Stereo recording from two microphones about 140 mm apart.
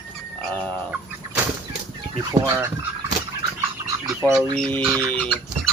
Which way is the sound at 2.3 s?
20° right (ahead or behind).